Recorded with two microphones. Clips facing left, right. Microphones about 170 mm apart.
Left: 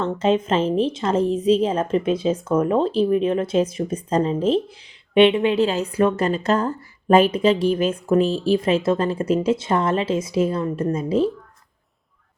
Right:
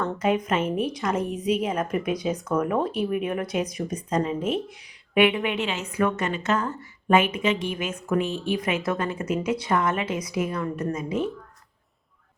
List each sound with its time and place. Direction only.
0.0 s a woman's voice: 25° left (ahead or behind)